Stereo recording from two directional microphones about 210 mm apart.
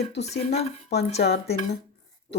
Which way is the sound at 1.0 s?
30° left (ahead or behind).